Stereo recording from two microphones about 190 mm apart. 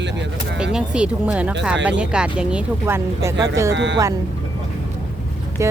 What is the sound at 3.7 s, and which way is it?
Speech, 70° right (ahead or behind).